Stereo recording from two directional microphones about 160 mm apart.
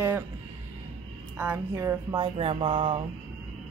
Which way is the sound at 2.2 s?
35° right (ahead or behind).